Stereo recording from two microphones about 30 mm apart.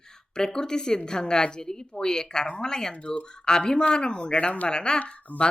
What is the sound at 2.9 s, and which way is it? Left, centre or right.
Speech, left.